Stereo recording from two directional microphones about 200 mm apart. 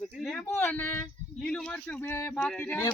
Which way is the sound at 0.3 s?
5° left (ahead or behind).